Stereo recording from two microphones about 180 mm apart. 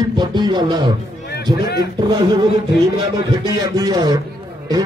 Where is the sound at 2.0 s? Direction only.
25° right (ahead or behind).